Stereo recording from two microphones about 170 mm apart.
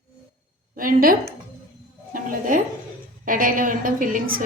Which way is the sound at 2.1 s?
55° right (ahead or behind).